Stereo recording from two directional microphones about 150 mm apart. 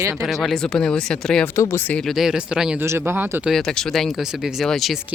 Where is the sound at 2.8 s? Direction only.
15° right (ahead or behind).